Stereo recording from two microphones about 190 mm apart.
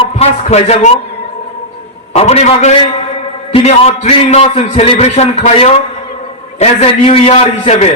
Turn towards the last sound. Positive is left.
turn(degrees=35)  # may be behind; listen again after turning